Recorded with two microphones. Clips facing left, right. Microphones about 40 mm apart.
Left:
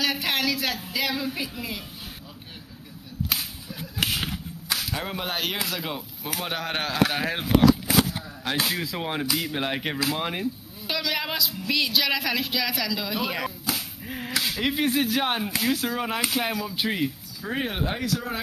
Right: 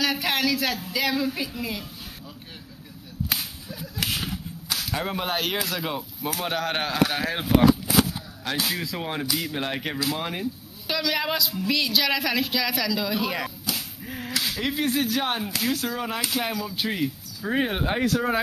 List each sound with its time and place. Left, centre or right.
0.0 s speech: centre
3.3 s whip: centre
4.9 s speech: centre
8.6 s speech: centre
18.0 s speech: right